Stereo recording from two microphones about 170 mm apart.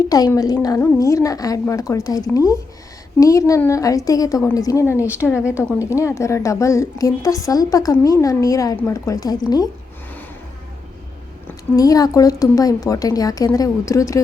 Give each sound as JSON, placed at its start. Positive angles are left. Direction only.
{"t": 0.1, "sound": "a woman's voice", "side_deg": 20}
{"t": 4.9, "sound": "speech", "side_deg": -10}
{"t": 5.5, "sound": "a woman's voice", "side_deg": 15}
{"t": 11.4, "sound": "a woman's voice", "side_deg": 20}